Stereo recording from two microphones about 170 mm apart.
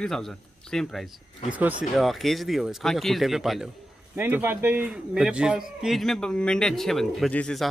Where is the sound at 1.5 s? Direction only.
10° right (ahead or behind).